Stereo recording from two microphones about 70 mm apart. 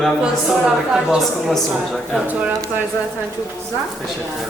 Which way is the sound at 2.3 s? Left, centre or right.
Right.